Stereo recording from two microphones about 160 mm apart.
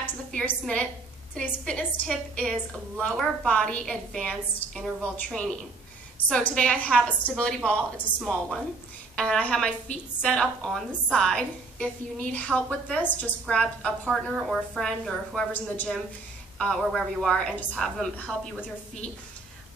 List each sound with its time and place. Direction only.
0.4 s a woman's voice: 5° left (ahead or behind)